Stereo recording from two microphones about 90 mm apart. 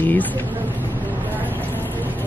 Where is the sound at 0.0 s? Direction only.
20° left (ahead or behind).